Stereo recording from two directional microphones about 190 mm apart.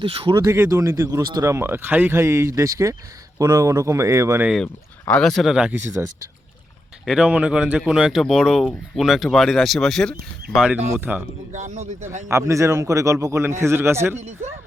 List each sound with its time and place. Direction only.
0.0 s speech: 30° right (ahead or behind)
0.3 s a man's voice: 15° right (ahead or behind)
4.5 s speech: 5° left (ahead or behind)
7.0 s a man's voice: 5° right (ahead or behind)
11.5 s speech: 40° right (ahead or behind)
12.3 s a man's voice: 15° right (ahead or behind)